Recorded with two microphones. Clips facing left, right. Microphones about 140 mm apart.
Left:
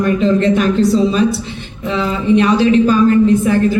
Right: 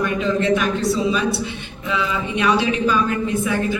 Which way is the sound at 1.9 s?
35° left (ahead or behind).